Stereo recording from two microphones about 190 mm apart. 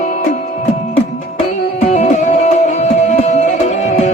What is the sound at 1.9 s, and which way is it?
Music, 40° left (ahead or behind).